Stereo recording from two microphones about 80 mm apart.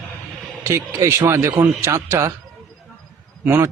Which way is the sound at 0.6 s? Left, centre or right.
Right.